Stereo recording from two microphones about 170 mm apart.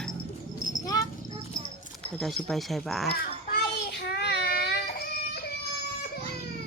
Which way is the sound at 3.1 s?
65° left (ahead or behind).